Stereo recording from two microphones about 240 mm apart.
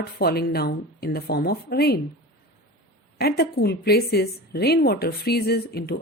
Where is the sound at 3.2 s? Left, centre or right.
Left.